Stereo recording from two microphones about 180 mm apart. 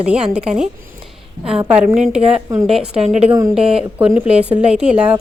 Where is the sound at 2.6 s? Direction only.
5° right (ahead or behind).